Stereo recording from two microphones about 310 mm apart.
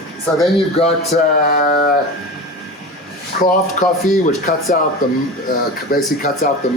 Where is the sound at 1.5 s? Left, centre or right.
Left.